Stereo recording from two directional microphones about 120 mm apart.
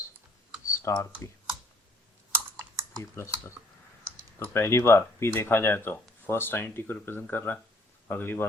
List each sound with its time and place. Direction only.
0.6 s speech: 20° left (ahead or behind)
2.3 s computer keyboard: 25° right (ahead or behind)
3.0 s speech: 20° left (ahead or behind)
4.5 s speech: 20° left (ahead or behind)